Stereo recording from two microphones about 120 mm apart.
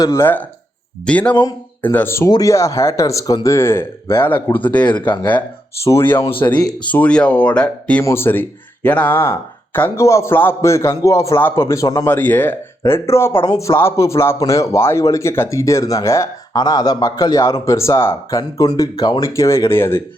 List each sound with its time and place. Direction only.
0.0 s speech: 25° left (ahead or behind)
1.0 s speech: 10° left (ahead or behind)
1.3 s speech: 35° left (ahead or behind)
1.8 s speech: 15° left (ahead or behind)
6.5 s speech: 35° left (ahead or behind)
6.8 s speech: 10° left (ahead or behind)
13.3 s speech: 35° left (ahead or behind)
19.3 s speech: 25° left (ahead or behind)